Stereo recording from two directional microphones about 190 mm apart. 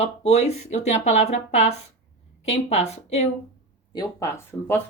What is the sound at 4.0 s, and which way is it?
Speech, 15° left (ahead or behind).